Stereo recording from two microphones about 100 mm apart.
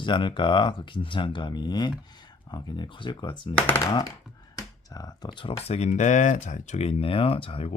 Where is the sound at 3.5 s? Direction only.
20° left (ahead or behind).